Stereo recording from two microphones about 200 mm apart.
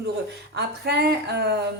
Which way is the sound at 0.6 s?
55° right (ahead or behind).